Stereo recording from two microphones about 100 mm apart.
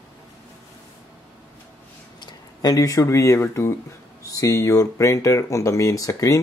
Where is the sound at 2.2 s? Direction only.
40° left (ahead or behind).